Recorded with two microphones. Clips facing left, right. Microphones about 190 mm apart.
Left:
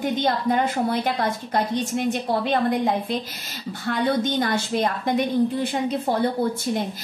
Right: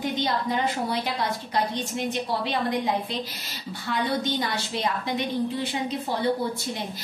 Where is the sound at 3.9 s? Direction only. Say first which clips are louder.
Left 4 dB; 50° left (ahead or behind).